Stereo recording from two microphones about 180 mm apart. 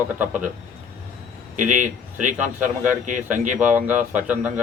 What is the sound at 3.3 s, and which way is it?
Speech, 45° right (ahead or behind).